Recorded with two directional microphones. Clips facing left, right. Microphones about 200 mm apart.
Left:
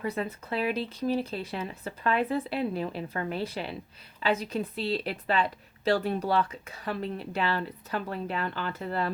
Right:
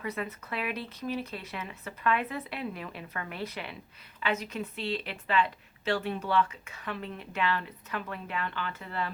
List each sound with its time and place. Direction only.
0.0 s a woman's voice: 30° left (ahead or behind)